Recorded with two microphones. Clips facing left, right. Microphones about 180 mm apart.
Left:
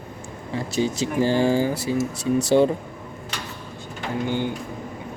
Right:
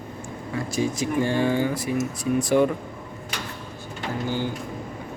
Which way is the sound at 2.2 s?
75° left (ahead or behind).